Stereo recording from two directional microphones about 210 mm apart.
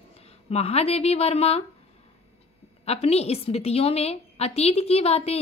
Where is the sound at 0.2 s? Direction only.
30° left (ahead or behind).